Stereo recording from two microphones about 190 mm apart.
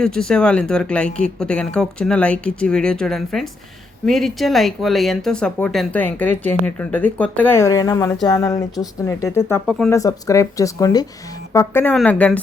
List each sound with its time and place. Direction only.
0.0 s speech: 5° left (ahead or behind)
9.9 s speech: 15° left (ahead or behind)